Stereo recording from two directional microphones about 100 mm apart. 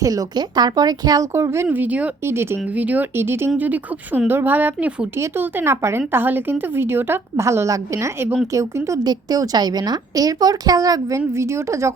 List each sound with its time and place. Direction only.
0.0 s a woman's voice: 35° right (ahead or behind)
1.6 s a woman's voice: 15° right (ahead or behind)
9.0 s a woman's voice: 40° right (ahead or behind)